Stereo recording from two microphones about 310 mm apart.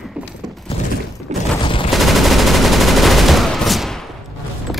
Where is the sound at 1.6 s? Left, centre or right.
Centre.